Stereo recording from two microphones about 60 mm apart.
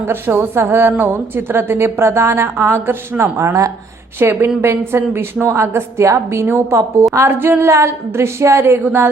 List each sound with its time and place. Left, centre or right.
0.0 s a woman's voice: right
8.8 s a woman's voice: right